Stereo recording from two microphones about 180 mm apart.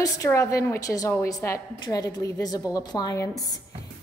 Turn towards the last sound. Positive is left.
turn(degrees=20)  # may be behind; listen again after turning